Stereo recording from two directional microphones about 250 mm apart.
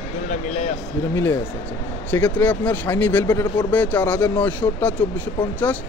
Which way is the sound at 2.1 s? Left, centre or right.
Centre.